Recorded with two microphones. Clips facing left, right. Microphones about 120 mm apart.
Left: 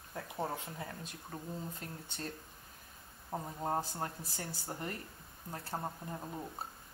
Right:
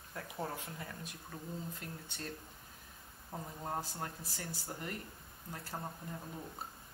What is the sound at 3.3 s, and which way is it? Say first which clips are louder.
Speech: left 5 dB; 35° left (ahead or behind).